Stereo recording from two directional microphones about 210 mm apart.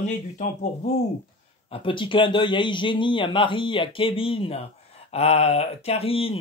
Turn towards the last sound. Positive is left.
turn(degrees=25)  # may be behind; listen again after turning